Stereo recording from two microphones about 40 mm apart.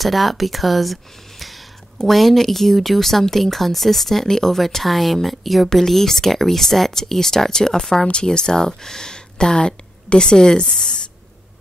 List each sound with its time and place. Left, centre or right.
0.0 s speech: centre
2.0 s speech: centre